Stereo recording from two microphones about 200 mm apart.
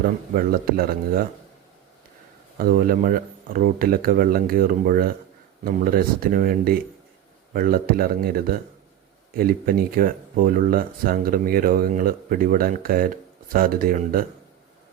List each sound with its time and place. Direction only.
0.0 s speech: 45° right (ahead or behind)
2.6 s speech: 45° right (ahead or behind)